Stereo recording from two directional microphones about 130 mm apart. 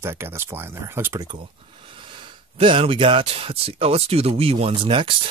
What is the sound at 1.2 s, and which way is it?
Speech, 40° right (ahead or behind).